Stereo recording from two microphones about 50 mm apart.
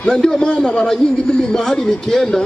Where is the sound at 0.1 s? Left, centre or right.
Centre.